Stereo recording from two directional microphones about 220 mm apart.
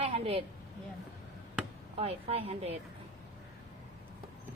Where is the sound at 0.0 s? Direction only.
25° right (ahead or behind).